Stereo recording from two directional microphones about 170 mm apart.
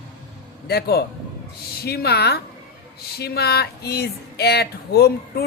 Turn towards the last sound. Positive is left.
turn(degrees=70)  # may be behind; listen again after turning